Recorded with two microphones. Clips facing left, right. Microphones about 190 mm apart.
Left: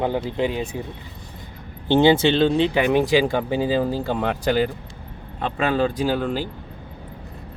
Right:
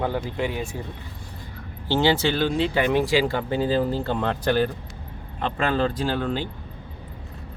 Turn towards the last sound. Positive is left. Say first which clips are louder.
# left 3 dB
turn(degrees=10)  # may be behind; listen again after turning